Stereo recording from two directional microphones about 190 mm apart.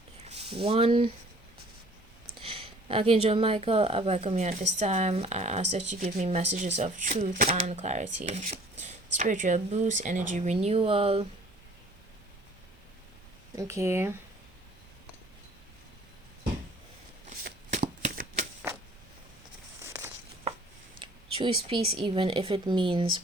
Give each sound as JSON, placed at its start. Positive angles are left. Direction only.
{"t": 0.3, "sound": "speech", "side_deg": -30}
{"t": 2.4, "sound": "speech", "side_deg": -30}
{"t": 13.6, "sound": "speech", "side_deg": -15}
{"t": 17.2, "sound": "shuffling cards", "side_deg": -40}
{"t": 19.8, "sound": "a sound", "side_deg": -15}
{"t": 21.0, "sound": "speech", "side_deg": -30}